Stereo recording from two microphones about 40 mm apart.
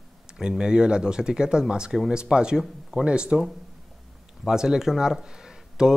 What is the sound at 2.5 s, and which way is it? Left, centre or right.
Speech, centre.